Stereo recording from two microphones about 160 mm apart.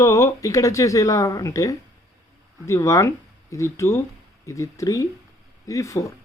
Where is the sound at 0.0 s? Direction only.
20° left (ahead or behind).